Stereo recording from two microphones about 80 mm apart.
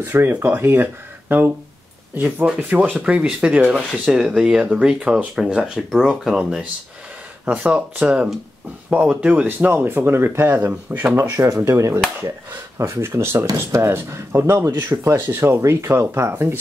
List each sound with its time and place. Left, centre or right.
0.0 s speech: right
2.1 s speech: right
7.7 s speech: centre
11.1 s speech: right